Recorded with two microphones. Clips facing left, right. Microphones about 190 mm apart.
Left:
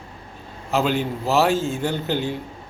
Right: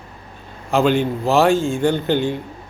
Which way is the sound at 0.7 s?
5° left (ahead or behind).